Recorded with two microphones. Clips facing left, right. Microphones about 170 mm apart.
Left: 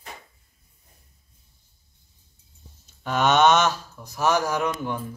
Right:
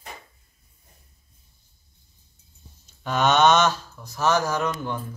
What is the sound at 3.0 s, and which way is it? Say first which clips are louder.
Speech: even; 5° left (ahead or behind).